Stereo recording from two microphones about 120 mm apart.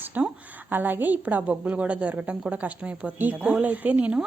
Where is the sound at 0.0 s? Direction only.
15° right (ahead or behind).